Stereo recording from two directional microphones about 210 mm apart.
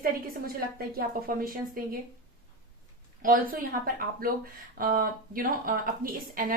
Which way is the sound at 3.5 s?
40° right (ahead or behind).